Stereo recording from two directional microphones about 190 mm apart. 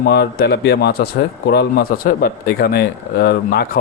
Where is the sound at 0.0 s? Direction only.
55° left (ahead or behind).